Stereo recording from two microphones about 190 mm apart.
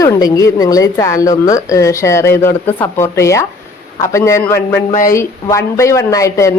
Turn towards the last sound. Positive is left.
turn(degrees=15)  # may be behind; listen again after turning